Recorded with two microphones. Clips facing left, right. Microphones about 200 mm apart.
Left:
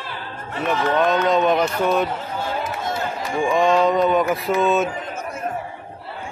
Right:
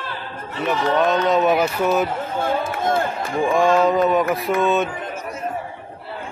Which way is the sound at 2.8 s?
50° right (ahead or behind).